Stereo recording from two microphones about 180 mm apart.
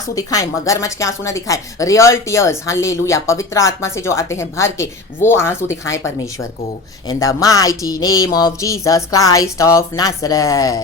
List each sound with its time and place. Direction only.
0.2 s speech: 20° left (ahead or behind)
7.1 s speech: 20° left (ahead or behind)